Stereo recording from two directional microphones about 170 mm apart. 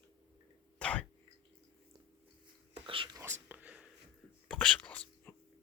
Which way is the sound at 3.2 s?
10° right (ahead or behind).